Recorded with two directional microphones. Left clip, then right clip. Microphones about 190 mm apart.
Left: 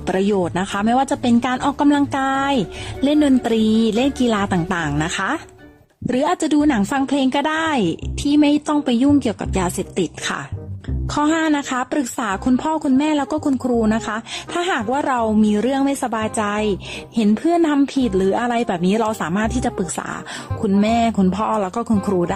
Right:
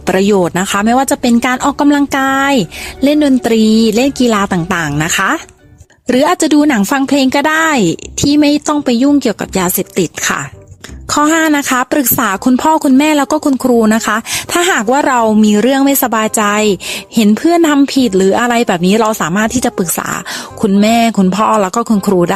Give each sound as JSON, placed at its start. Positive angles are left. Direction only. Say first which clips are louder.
{"t": 0.0, "sound": "speech", "louder": "right 8 dB", "side_deg": -40}